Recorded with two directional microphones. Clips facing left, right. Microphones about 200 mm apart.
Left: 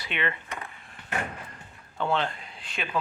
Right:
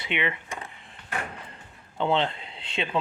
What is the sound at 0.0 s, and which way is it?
Speech, 15° right (ahead or behind).